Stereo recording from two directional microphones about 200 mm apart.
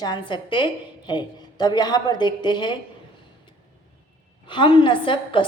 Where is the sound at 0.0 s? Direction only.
20° left (ahead or behind).